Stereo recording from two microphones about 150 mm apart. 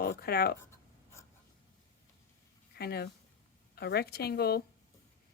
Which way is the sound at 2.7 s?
90° left.